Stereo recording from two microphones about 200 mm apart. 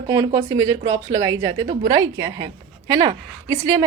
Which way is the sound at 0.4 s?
15° right (ahead or behind).